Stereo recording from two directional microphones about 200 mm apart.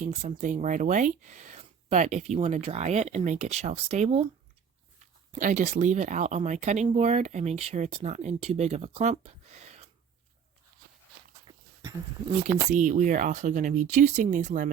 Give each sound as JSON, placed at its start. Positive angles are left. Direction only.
{"t": 0.0, "sound": "speech", "side_deg": -35}
{"t": 5.3, "sound": "speech", "side_deg": -40}
{"t": 11.4, "sound": "a sound", "side_deg": -20}
{"t": 12.7, "sound": "speech", "side_deg": -40}